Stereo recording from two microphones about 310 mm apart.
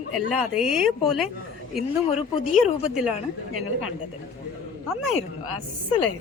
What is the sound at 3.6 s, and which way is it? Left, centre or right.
Speech, left.